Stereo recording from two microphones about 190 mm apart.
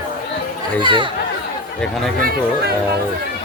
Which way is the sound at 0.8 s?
25° right (ahead or behind).